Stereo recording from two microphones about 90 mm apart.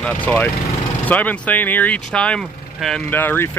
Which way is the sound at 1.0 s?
20° left (ahead or behind).